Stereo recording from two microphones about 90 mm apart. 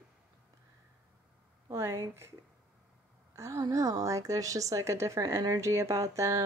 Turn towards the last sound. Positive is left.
turn(degrees=-35)  # may be behind; listen again after turning